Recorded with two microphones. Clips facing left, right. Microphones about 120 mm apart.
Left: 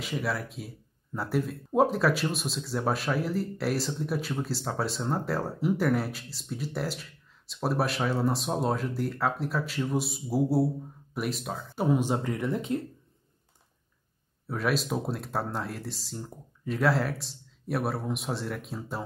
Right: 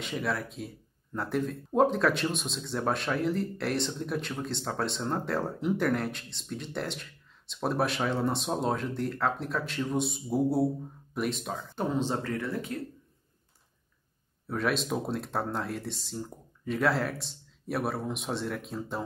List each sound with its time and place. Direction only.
0.0 s speech: 5° left (ahead or behind); by 12.8 s 20° left (ahead or behind)
14.5 s speech: centre (ahead or behind)